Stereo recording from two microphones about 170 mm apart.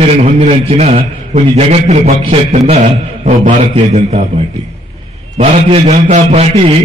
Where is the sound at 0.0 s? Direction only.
40° right (ahead or behind).